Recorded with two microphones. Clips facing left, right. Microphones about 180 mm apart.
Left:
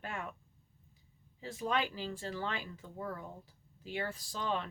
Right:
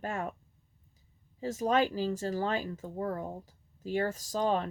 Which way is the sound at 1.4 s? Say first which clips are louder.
Right 7 dB; 40° right (ahead or behind).